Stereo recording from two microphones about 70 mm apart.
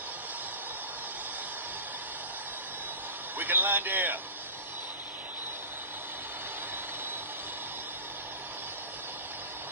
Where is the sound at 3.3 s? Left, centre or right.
Right.